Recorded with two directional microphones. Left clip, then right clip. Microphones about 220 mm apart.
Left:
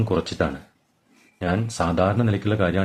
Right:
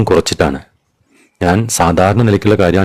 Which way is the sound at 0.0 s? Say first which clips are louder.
Right 12 dB; 50° right (ahead or behind).